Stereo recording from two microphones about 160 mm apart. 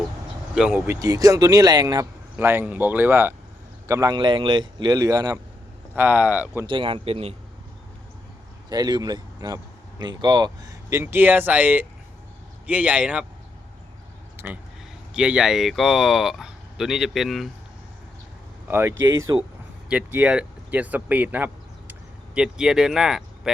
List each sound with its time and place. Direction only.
0.5 s speech: 5° right (ahead or behind)
0.9 s speech: 20° right (ahead or behind)
2.3 s speech: 15° right (ahead or behind)
5.9 s speech: 10° right (ahead or behind)
6.7 s speech: 30° right (ahead or behind)
8.7 s speech: 25° right (ahead or behind); by 13.2 s 5° right (ahead or behind)
14.3 s speech: 10° right (ahead or behind)
18.7 s speech: 15° right (ahead or behind)